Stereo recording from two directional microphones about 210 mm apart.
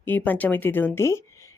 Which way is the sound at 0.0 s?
10° left (ahead or behind).